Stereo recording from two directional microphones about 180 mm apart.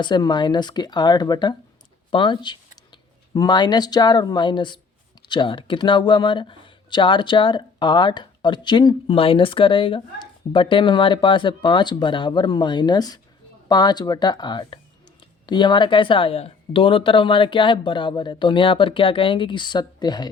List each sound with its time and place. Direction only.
0.0 s speech: 25° left (ahead or behind)